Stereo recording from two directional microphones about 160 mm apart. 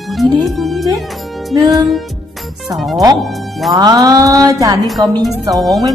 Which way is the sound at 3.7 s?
25° right (ahead or behind).